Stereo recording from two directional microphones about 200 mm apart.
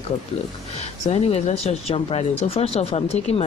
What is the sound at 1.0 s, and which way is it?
Speech, 30° left (ahead or behind).